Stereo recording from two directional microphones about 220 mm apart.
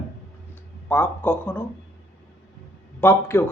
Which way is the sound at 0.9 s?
10° left (ahead or behind).